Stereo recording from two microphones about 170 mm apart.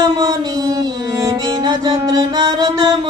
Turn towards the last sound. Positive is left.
turn(degrees=-25)  # may be behind; listen again after turning